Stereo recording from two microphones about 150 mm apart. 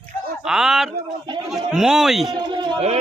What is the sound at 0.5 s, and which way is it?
A man's voice, 5° right (ahead or behind).